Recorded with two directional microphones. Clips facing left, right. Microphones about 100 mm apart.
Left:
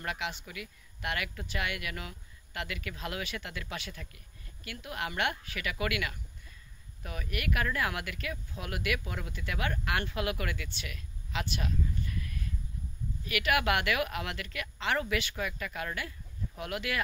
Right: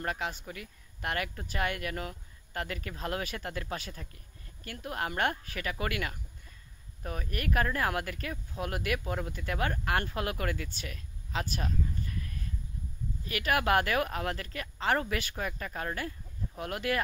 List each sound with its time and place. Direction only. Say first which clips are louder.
0.0 s speech: right 2 dB; 35° right (ahead or behind)